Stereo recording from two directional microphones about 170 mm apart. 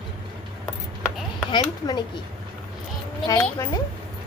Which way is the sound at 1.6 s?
25° left (ahead or behind).